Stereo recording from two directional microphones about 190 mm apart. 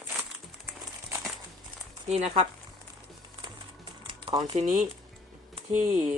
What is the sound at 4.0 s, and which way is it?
Typing, 25° right (ahead or behind).